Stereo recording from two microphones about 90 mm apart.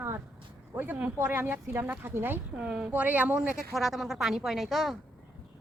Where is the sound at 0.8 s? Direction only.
20° right (ahead or behind).